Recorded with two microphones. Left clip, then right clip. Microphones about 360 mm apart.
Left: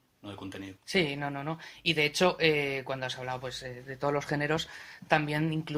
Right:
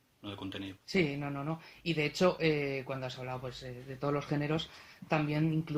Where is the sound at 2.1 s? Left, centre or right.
Left.